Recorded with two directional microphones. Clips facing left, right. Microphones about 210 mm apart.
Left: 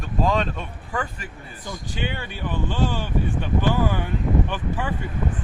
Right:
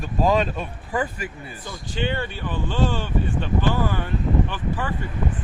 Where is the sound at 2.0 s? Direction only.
10° left (ahead or behind).